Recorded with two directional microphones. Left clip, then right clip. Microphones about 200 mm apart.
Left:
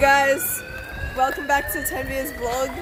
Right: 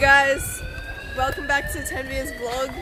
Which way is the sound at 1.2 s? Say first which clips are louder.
Left 2 dB; 5° left (ahead or behind).